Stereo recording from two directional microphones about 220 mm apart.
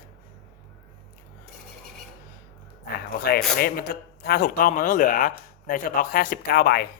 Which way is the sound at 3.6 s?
45° left (ahead or behind).